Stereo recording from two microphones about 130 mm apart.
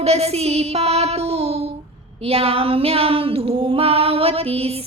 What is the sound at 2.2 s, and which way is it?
Female singing, 50° right (ahead or behind).